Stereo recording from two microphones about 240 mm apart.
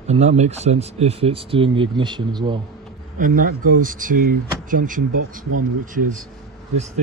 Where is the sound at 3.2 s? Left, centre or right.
Right.